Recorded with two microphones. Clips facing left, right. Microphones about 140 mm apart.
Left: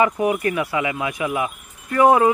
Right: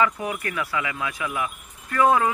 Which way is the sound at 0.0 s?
20° left (ahead or behind).